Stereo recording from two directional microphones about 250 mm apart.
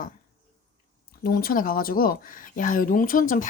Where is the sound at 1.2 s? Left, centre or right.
Left.